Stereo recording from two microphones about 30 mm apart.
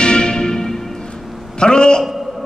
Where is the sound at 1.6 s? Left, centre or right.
Left.